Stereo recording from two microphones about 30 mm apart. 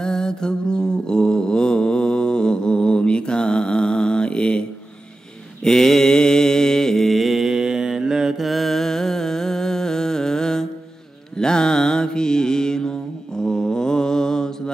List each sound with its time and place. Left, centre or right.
0.0 s mantra: left
5.6 s mantra: centre
7.2 s mantra: centre
7.5 s mantra: centre
8.4 s mantra: centre; by 14.5 s left